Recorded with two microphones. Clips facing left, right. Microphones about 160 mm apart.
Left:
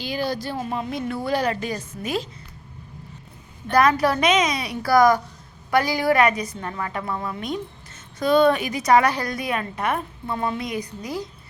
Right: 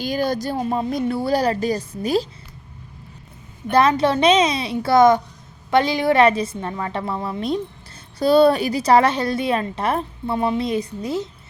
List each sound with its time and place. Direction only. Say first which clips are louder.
0.0 s a woman's voice: right 4 dB; 45° right (ahead or behind)
3.7 s a woman's voice: right 2 dB; 25° right (ahead or behind)